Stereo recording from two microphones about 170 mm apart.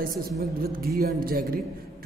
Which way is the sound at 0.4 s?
65° right (ahead or behind).